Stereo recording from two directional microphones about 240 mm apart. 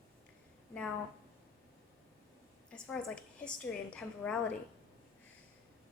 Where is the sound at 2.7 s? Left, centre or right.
Centre.